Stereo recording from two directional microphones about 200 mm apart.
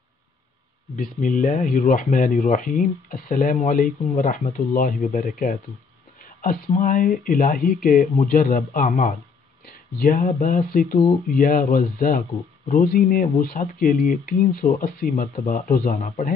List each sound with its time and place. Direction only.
0.9 s speech: 40° left (ahead or behind)
15.1 s speech: 35° left (ahead or behind)